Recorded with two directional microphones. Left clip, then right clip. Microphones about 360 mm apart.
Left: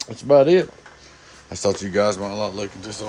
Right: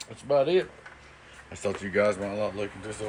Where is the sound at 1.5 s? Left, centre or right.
Centre.